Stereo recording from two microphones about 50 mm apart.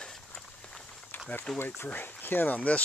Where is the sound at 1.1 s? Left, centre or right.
Left.